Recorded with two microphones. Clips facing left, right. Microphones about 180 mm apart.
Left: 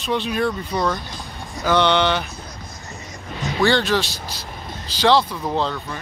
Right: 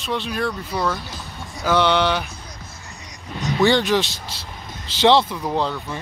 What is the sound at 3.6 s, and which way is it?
Speech, 15° right (ahead or behind).